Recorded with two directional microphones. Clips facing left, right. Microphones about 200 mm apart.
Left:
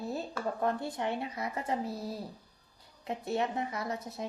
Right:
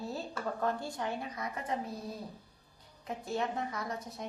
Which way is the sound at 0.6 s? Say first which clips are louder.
Left 2 dB; 20° left (ahead or behind).